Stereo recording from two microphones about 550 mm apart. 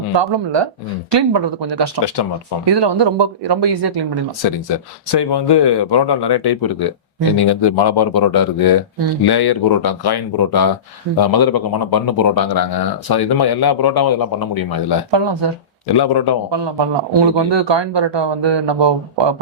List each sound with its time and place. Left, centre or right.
0.2 s speech: right
2.0 s speech: left
2.6 s speech: right
4.7 s speech: left
15.1 s speech: right
16.0 s speech: left
16.5 s speech: right